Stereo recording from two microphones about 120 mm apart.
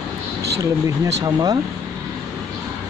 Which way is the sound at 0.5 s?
30° right (ahead or behind).